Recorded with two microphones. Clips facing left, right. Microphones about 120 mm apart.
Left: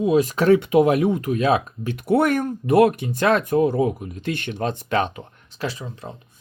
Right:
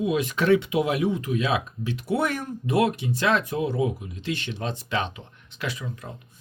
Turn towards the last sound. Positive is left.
turn(degrees=30)  # may be behind; listen again after turning